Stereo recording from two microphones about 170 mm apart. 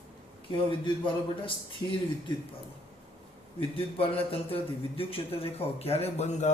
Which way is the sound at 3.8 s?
35° left (ahead or behind).